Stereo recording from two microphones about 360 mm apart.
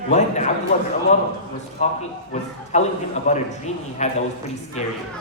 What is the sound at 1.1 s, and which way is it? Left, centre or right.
A man's voice, centre.